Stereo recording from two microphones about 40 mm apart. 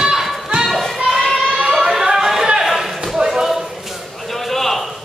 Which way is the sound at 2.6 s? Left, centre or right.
Centre.